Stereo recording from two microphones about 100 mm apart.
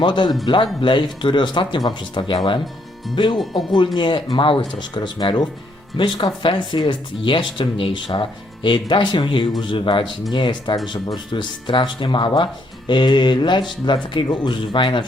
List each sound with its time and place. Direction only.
0.0 s speech: 50° left (ahead or behind)
6.0 s speech: 55° left (ahead or behind)